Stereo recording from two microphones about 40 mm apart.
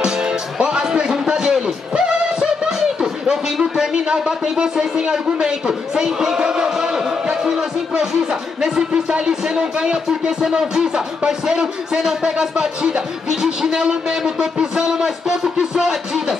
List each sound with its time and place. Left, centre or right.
0.0 s music: centre
3.9 s a man's voice: centre